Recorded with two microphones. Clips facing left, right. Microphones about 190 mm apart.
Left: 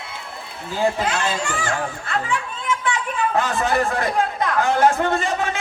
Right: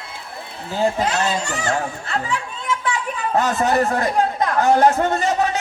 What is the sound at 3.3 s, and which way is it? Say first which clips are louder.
A man's voice: right 4 dB; 40° right (ahead or behind).